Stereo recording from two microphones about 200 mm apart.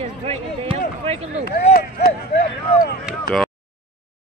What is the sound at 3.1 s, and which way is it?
Speech, centre (ahead or behind).